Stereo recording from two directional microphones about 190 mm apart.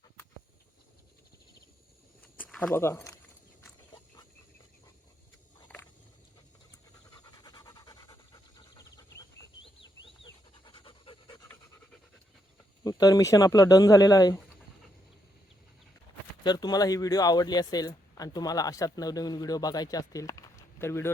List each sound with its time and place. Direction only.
2.2 s a sound: 5° left (ahead or behind)
2.7 s speech: 15° left (ahead or behind)
5.6 s a sound: 5° left (ahead or behind)
7.1 s pant: 20° left (ahead or behind)
12.8 s speech: 20° left (ahead or behind)
16.4 s speech: 20° left (ahead or behind)